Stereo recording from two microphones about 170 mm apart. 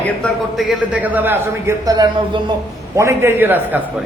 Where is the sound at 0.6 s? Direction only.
5° right (ahead or behind).